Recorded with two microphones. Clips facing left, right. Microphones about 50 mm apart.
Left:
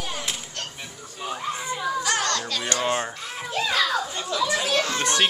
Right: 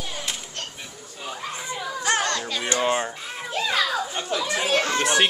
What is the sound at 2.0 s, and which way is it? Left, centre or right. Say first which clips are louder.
Music: right 1 dB; right.